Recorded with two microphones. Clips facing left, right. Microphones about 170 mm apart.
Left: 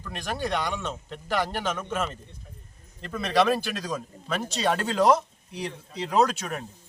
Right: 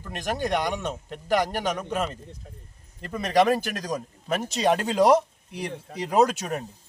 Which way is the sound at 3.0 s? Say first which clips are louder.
Right 2 dB; 15° right (ahead or behind).